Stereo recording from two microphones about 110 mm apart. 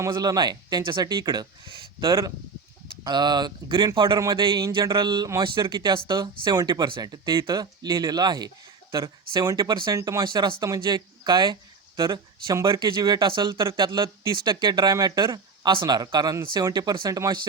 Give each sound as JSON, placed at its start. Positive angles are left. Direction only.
{"t": 0.1, "sound": "speech", "side_deg": -40}